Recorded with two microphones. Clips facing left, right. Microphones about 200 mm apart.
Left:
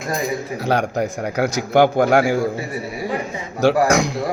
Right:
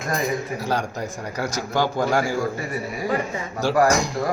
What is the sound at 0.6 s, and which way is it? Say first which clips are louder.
A man's voice: left 6 dB; 65° left (ahead or behind).